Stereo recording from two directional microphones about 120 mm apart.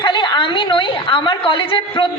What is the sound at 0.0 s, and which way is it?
A woman's voice, 40° left (ahead or behind).